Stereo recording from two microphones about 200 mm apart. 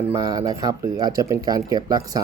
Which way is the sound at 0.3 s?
20° right (ahead or behind).